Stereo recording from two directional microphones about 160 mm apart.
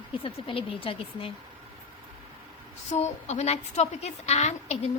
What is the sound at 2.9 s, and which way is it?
A woman's voice, 45° left (ahead or behind).